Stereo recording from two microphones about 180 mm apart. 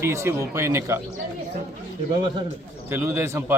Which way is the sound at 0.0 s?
15° right (ahead or behind).